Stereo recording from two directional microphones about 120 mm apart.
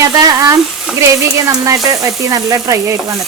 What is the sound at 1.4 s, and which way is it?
Frying, 25° right (ahead or behind).